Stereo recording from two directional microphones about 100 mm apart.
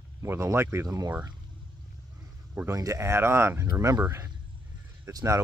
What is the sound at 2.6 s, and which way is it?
Speech, 30° right (ahead or behind).